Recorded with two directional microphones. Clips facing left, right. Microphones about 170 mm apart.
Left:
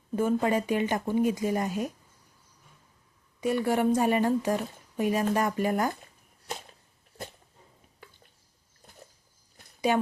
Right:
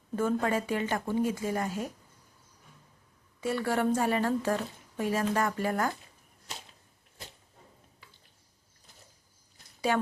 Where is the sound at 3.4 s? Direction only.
15° left (ahead or behind).